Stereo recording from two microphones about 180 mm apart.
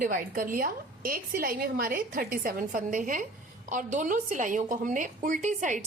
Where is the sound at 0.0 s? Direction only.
50° right (ahead or behind).